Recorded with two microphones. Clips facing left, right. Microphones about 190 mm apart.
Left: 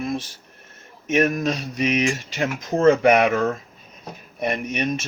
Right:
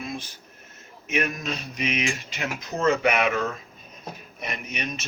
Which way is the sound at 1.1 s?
50° left (ahead or behind).